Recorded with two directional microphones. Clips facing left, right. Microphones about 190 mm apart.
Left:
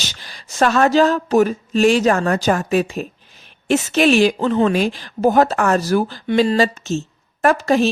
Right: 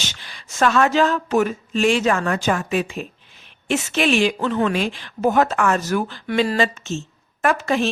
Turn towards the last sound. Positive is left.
turn(degrees=40)  # may be behind; listen again after turning